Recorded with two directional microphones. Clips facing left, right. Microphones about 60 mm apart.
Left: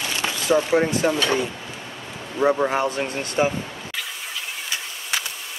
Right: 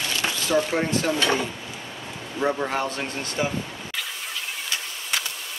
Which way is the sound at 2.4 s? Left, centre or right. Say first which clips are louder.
Left 5 dB; centre.